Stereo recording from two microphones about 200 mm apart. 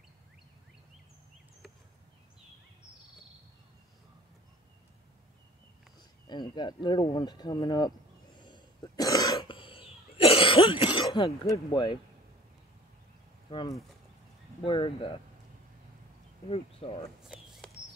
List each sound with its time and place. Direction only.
6.2 s insect: 20° left (ahead or behind)
11.5 s speech: 25° left (ahead or behind)
13.5 s speech: 25° left (ahead or behind)
16.4 s speech: 30° left (ahead or behind)
17.6 s a sound: 5° left (ahead or behind)